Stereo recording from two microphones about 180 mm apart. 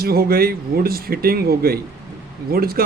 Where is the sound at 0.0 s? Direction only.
55° right (ahead or behind).